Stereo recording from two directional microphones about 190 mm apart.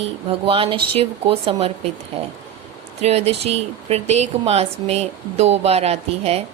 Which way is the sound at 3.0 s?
35° right (ahead or behind).